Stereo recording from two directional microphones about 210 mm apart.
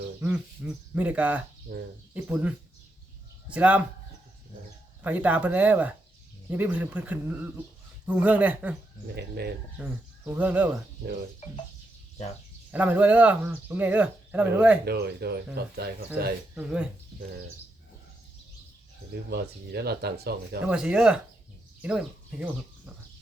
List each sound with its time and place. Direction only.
0.2 s speech: 5° right (ahead or behind)
1.7 s speech: 50° right (ahead or behind)
2.1 s speech: 5° right (ahead or behind)
5.0 s speech: 5° right (ahead or behind)
9.1 s speech: 50° right (ahead or behind)
10.2 s speech: 5° right (ahead or behind)
12.7 s speech: 5° right (ahead or behind)
14.8 s speech: 50° right (ahead or behind)
19.3 s speech: 50° right (ahead or behind)
20.7 s speech: 5° right (ahead or behind)